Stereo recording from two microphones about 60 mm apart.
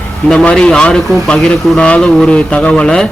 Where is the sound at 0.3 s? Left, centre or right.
Centre.